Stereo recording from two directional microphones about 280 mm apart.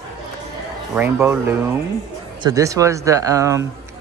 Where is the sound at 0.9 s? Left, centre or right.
Centre.